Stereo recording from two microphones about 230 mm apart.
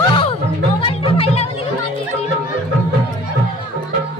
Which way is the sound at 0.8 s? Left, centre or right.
Left.